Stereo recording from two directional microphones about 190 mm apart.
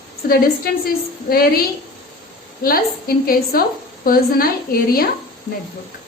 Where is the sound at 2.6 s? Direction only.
50° left (ahead or behind).